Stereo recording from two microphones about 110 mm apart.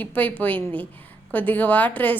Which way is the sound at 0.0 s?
15° left (ahead or behind).